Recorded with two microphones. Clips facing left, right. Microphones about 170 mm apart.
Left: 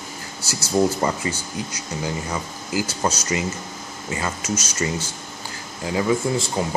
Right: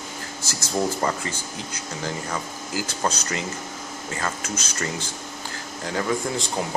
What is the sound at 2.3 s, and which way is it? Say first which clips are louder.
Speech: left 3 dB; 10° left (ahead or behind).